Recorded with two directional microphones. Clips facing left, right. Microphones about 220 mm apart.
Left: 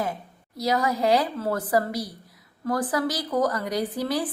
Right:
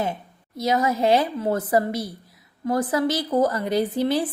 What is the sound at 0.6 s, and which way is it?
A woman's voice, 20° right (ahead or behind).